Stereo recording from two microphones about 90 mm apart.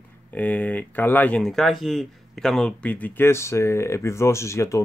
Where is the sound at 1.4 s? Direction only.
5° left (ahead or behind).